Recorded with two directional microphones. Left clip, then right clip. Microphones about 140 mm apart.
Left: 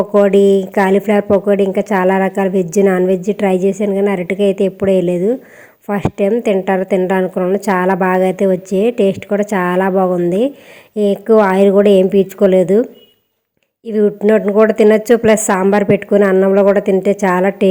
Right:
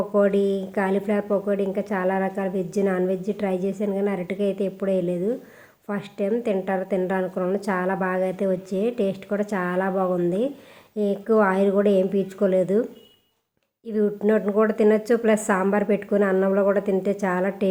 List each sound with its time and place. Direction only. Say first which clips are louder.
0.1 s speech: left 11 dB; 55° left (ahead or behind)